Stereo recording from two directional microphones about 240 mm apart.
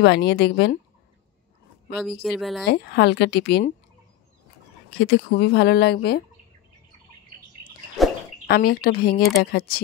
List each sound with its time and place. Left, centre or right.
0.0 s speech: left
2.2 s speech: centre
2.6 s speech: left
4.9 s speech: left
8.5 s speech: left